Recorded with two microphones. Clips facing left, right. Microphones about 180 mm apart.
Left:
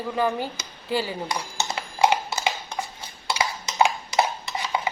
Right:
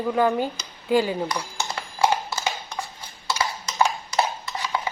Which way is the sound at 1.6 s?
20° left (ahead or behind).